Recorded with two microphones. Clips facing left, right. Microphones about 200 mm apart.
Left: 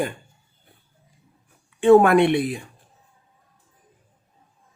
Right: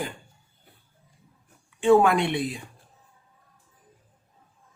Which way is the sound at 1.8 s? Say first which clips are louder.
Left 5 dB; 55° left (ahead or behind).